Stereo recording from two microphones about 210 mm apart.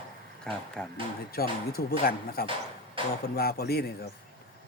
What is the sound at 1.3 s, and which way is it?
Speech, 45° left (ahead or behind).